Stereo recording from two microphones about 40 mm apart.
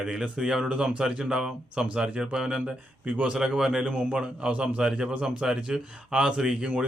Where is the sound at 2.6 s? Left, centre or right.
Right.